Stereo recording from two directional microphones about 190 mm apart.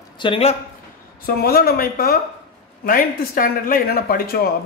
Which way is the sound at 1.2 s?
55° left (ahead or behind).